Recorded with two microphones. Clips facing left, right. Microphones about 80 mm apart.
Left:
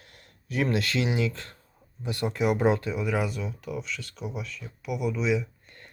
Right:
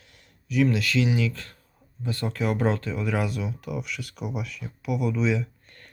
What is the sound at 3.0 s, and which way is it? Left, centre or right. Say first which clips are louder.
Speech: right 1 dB; centre.